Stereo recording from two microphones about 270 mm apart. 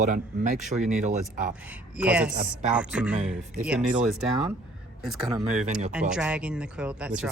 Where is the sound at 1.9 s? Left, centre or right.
Centre.